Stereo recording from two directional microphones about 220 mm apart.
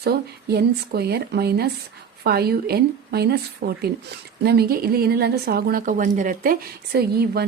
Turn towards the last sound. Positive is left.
turn(degrees=-45)  # may be behind; listen again after turning